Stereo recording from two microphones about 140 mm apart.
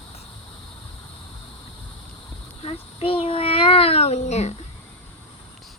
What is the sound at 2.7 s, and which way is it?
Child singing, 40° left (ahead or behind).